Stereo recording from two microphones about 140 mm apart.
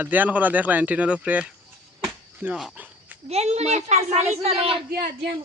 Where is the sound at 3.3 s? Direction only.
50° right (ahead or behind).